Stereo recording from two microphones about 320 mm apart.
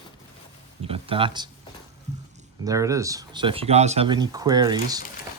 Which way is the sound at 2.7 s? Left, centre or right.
Centre.